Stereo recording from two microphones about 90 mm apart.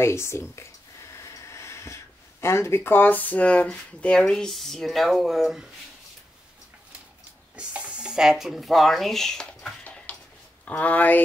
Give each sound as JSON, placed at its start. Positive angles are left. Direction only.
{"t": 0.0, "sound": "speech", "side_deg": 30}
{"t": 1.1, "sound": "vehicle", "side_deg": 30}
{"t": 2.4, "sound": "speech", "side_deg": 30}
{"t": 7.5, "sound": "speech", "side_deg": -15}